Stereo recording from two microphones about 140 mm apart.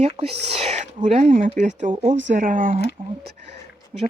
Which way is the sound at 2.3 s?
70° right (ahead or behind).